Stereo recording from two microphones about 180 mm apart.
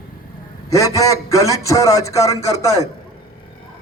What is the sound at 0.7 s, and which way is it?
A man's voice, 20° left (ahead or behind).